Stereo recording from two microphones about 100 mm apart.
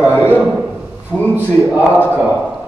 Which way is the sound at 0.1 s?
20° left (ahead or behind).